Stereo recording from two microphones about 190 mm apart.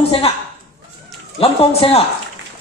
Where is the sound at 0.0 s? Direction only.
30° left (ahead or behind).